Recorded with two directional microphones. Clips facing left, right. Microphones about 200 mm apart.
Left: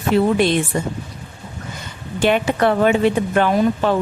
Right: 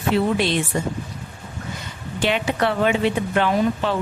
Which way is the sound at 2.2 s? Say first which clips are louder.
Left 5 dB; 50° left (ahead or behind).